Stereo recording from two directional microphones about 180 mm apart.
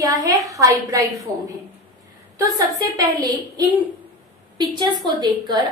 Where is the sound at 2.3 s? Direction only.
20° right (ahead or behind).